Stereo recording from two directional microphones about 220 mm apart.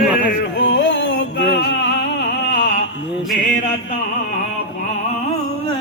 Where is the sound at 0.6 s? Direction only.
50° left (ahead or behind).